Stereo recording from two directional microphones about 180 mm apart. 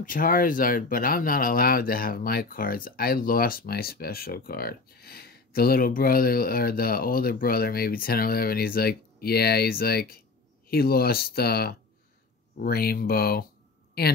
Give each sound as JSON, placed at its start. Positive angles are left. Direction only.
{"t": 0.0, "sound": "speech", "side_deg": 50}